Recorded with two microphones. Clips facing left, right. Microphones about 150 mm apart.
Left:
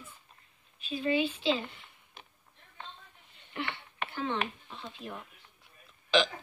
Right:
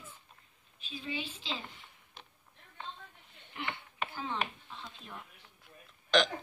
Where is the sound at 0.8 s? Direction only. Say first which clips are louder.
Left 11 dB; 65° left (ahead or behind).